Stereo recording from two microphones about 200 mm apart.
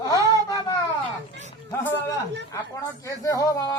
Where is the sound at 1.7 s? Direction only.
15° left (ahead or behind).